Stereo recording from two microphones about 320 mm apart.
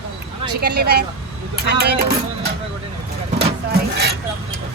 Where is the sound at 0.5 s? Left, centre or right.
Right.